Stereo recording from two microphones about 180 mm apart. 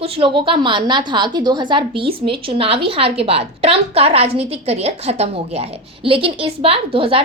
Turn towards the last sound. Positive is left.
turn(degrees=-30)  # may be behind; listen again after turning